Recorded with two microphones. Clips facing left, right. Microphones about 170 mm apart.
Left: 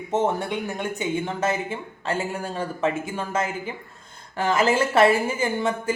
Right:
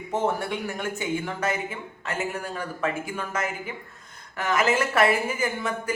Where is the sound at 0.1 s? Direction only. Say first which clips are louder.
Left 3 dB; 20° left (ahead or behind).